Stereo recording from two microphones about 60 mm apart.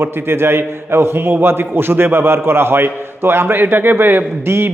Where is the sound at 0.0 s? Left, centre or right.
Right.